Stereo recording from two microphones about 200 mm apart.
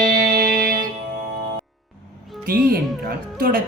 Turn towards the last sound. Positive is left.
turn(degrees=-50)  # may be behind; listen again after turning